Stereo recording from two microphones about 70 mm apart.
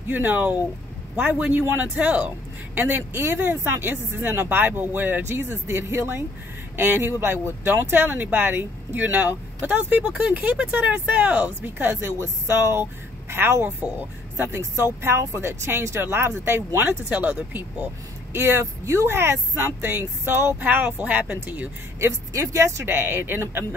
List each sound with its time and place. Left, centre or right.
0.1 s speech: right
20.6 s speech: right
22.0 s speech: right